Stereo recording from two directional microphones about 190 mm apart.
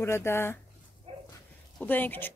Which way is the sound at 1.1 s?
30° right (ahead or behind).